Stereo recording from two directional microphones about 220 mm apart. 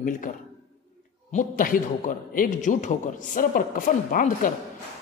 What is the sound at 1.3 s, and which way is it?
A man's voice, 35° left (ahead or behind).